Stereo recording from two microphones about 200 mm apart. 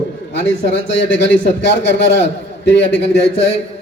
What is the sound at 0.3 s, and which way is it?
A man's voice, 65° left (ahead or behind).